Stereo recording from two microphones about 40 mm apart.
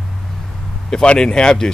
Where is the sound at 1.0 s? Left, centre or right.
Left.